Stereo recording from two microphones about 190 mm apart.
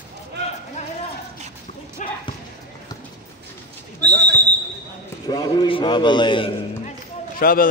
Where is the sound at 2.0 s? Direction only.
40° left (ahead or behind).